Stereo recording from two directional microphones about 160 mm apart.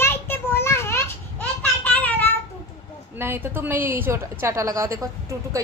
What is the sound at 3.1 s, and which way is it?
A woman's voice, 15° right (ahead or behind).